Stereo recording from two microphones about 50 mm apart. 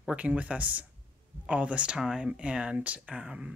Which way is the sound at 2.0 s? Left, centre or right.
Centre.